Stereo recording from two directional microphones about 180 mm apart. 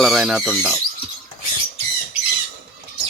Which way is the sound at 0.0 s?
Centre (ahead or behind).